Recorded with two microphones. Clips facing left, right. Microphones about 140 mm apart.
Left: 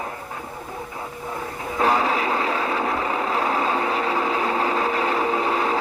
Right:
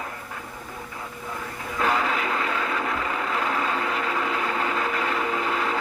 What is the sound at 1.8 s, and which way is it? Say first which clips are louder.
Vehicle: left 4 dB; 30° left (ahead or behind).